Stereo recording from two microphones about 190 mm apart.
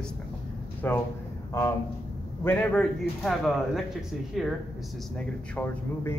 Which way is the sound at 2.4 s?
10° left (ahead or behind).